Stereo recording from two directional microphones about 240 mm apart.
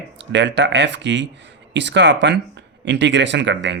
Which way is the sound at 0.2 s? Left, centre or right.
Right.